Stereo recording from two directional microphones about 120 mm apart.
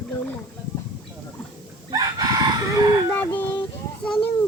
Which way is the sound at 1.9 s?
30° right (ahead or behind).